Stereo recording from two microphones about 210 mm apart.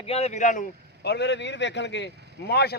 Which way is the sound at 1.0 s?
55° left (ahead or behind).